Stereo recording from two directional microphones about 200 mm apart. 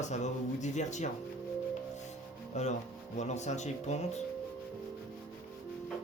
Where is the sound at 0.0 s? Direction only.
35° left (ahead or behind).